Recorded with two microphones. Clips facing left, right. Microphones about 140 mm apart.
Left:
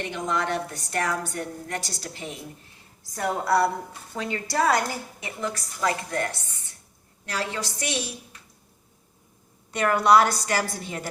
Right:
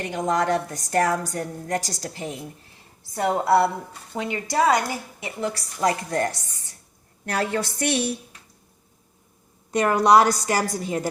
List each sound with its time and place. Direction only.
0.0 s a woman's voice: 40° right (ahead or behind)
3.0 s a woman's voice: 25° right (ahead or behind)
5.2 s a woman's voice: 30° right (ahead or behind)
7.3 s a woman's voice: 55° right (ahead or behind)
9.7 s a woman's voice: 45° right (ahead or behind)